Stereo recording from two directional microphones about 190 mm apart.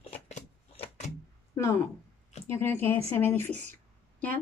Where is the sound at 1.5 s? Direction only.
15° left (ahead or behind).